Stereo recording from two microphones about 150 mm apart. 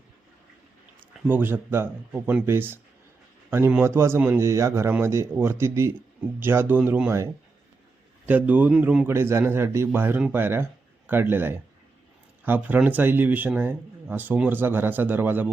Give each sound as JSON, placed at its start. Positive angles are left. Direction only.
{"t": 1.3, "sound": "a man's voice", "side_deg": -15}
{"t": 8.3, "sound": "a man's voice", "side_deg": -10}